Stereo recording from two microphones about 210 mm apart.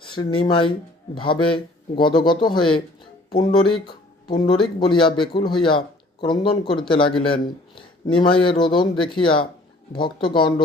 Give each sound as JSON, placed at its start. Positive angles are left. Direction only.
{"t": 0.0, "sound": "speech", "side_deg": 25}